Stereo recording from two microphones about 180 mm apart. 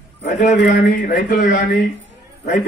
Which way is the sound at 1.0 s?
50° left (ahead or behind).